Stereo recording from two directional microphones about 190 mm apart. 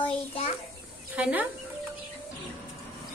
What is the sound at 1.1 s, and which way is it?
Speech, 10° right (ahead or behind).